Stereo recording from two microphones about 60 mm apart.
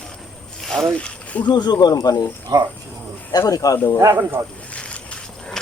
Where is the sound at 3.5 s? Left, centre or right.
Left.